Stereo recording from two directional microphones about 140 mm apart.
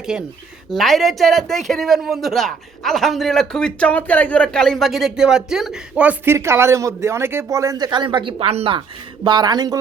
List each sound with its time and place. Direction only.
0.0 s speech: 5° right (ahead or behind); by 8.8 s 45° right (ahead or behind)
9.2 s speech: 30° right (ahead or behind)